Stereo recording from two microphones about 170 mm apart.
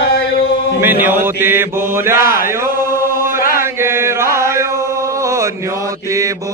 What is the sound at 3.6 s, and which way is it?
Chant, 15° right (ahead or behind).